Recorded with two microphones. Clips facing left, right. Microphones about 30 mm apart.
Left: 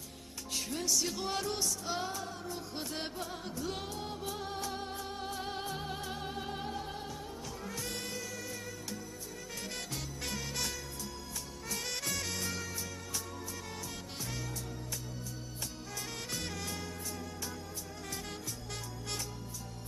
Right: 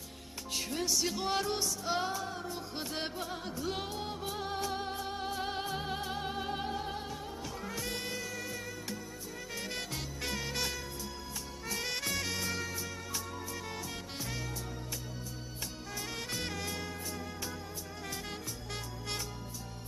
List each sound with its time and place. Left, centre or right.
0.7 s music: centre
10.2 s music: centre
11.7 s music: centre
16.3 s music: centre